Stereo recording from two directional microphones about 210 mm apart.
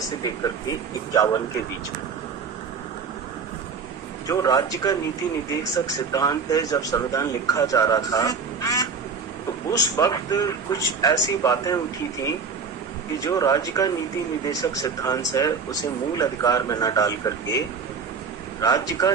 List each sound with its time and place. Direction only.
0.2 s speech: 15° left (ahead or behind)
4.3 s speech: 15° left (ahead or behind)
18.6 s speech: 15° left (ahead or behind)